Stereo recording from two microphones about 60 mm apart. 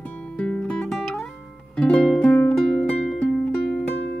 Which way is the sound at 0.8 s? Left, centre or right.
Centre.